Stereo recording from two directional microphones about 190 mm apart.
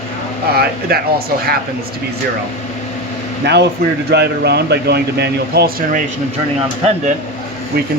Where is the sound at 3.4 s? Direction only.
60° right (ahead or behind).